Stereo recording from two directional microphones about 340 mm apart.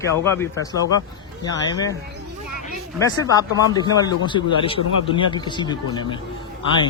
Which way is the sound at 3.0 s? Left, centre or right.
Centre.